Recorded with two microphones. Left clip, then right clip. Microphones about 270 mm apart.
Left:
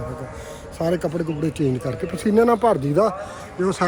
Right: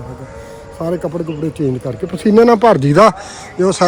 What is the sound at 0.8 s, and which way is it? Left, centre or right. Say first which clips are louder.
Speech: right 3 dB; centre.